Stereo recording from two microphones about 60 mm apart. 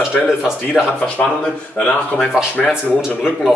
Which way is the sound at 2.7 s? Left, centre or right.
Centre.